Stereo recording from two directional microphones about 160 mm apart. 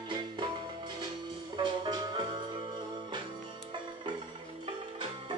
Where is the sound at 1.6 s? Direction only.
25° right (ahead or behind).